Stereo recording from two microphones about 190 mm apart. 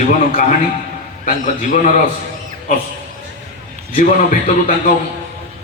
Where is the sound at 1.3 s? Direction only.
45° left (ahead or behind).